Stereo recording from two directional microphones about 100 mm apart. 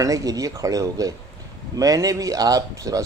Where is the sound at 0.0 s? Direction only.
35° right (ahead or behind).